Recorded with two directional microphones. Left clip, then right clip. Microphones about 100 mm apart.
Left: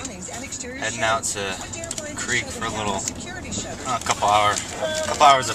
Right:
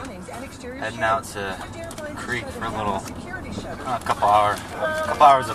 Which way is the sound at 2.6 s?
Centre (ahead or behind).